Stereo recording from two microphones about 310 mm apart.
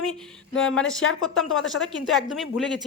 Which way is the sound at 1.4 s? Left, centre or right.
Left.